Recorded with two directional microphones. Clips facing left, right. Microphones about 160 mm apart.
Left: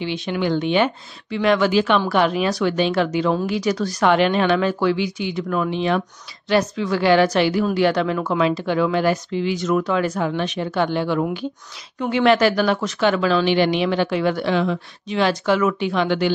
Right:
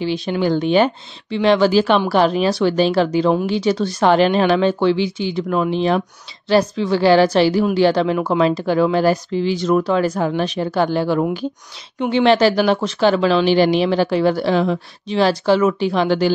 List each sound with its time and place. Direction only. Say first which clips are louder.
0.0 s speech: right 4 dB; 35° right (ahead or behind)
12.0 s speech: right 2 dB; 25° right (ahead or behind)